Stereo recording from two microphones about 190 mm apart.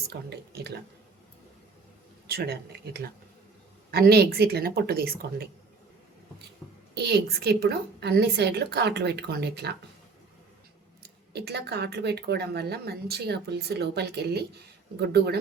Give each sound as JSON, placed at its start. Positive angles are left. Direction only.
{"t": 0.1, "sound": "speech", "side_deg": -60}
{"t": 2.2, "sound": "speech", "side_deg": -55}
{"t": 6.9, "sound": "speech", "side_deg": -60}
{"t": 11.3, "sound": "speech", "side_deg": -60}